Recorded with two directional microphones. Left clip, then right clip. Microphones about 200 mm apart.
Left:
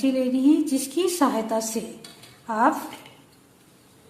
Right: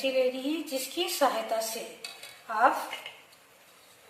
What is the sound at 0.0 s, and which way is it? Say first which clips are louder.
A woman's voice: left 5 dB; 50° left (ahead or behind).